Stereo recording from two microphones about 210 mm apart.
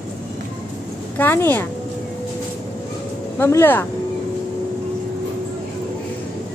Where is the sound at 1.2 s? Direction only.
10° left (ahead or behind).